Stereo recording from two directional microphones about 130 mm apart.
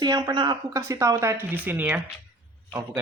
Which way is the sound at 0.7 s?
25° right (ahead or behind).